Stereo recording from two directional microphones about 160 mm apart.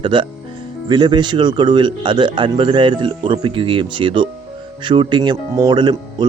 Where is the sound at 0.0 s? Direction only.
30° right (ahead or behind).